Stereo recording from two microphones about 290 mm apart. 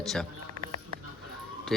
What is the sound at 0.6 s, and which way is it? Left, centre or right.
Music, right.